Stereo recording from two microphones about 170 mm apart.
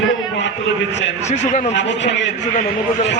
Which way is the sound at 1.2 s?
45° left (ahead or behind).